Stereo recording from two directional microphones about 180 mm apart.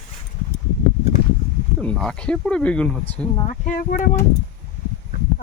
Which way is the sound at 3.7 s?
50° left (ahead or behind).